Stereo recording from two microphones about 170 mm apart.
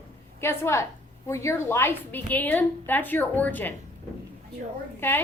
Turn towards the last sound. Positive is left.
turn(degrees=10)  # may be behind; listen again after turning